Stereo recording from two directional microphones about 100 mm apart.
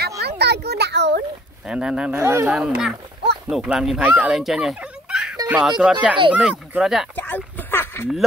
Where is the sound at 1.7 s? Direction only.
10° right (ahead or behind).